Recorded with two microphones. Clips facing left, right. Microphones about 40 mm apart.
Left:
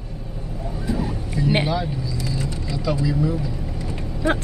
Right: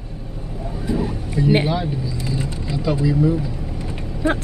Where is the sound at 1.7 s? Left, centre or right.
Centre.